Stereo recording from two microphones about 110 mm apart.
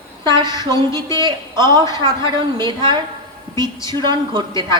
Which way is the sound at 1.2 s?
40° right (ahead or behind).